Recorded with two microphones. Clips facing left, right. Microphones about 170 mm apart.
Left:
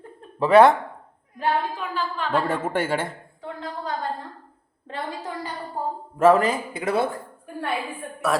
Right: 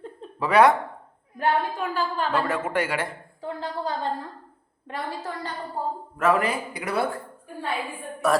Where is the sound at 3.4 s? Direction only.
35° right (ahead or behind).